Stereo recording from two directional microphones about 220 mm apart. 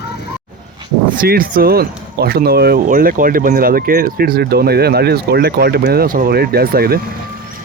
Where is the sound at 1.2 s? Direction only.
40° right (ahead or behind).